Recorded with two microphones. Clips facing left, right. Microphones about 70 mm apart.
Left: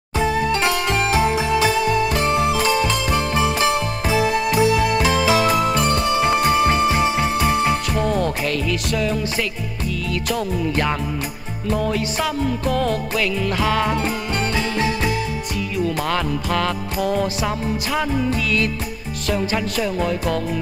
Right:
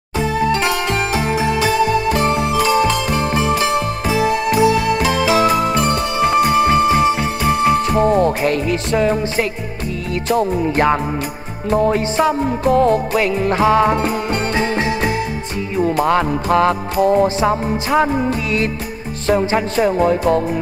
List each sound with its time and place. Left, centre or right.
7.9 s music: right
15.8 s music: right